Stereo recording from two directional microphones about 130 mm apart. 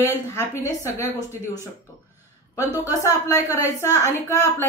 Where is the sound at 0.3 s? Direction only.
20° left (ahead or behind).